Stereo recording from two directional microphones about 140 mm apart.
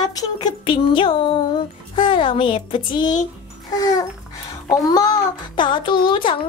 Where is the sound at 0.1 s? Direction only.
30° left (ahead or behind).